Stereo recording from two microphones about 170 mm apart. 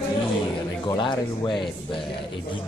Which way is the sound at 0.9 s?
25° left (ahead or behind).